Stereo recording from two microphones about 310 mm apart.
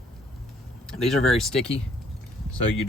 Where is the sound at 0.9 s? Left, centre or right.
Centre.